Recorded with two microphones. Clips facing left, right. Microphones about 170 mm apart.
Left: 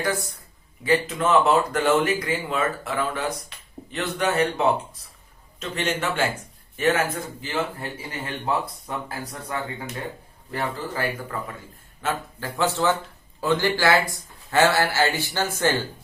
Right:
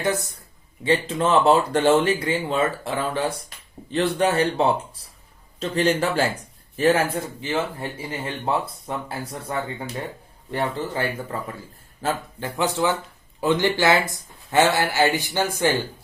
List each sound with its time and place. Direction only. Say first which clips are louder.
0.0 s speech: right 2 dB; 20° right (ahead or behind)
12.4 s speech: even; 15° right (ahead or behind)